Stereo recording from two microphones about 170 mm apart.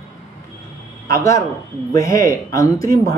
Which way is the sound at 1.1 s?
20° left (ahead or behind).